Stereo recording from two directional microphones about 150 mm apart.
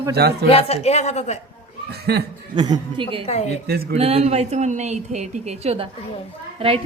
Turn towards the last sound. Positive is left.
turn(degrees=-40)  # may be behind; listen again after turning